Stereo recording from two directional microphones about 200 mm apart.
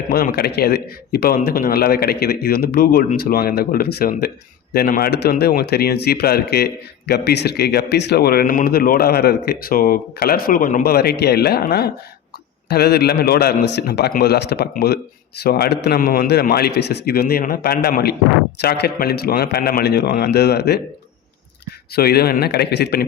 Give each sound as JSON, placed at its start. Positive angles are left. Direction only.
{"t": 0.1, "sound": "speech", "side_deg": 50}
{"t": 21.9, "sound": "speech", "side_deg": 50}